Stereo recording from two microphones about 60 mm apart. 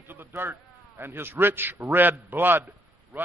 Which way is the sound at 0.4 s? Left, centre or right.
Right.